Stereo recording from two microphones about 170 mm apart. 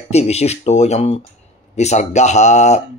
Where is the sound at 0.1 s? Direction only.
40° left (ahead or behind).